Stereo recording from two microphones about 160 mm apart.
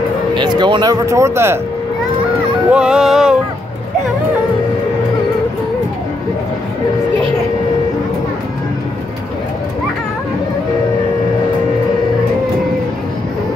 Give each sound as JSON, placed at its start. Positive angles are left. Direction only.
{"t": 0.3, "sound": "speech", "side_deg": -30}
{"t": 1.0, "sound": "speech", "side_deg": -20}
{"t": 2.7, "sound": "a sound", "side_deg": -5}